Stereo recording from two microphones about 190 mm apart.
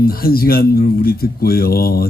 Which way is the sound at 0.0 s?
50° left (ahead or behind).